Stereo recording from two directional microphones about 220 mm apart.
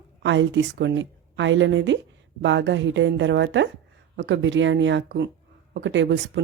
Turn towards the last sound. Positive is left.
turn(degrees=-55)  # may be behind; listen again after turning